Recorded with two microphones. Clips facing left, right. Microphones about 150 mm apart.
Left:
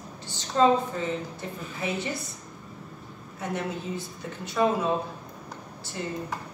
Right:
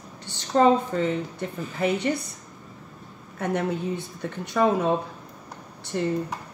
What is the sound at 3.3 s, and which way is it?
A woman's voice, 55° right (ahead or behind).